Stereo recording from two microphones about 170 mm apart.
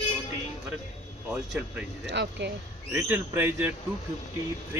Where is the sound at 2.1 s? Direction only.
90° right.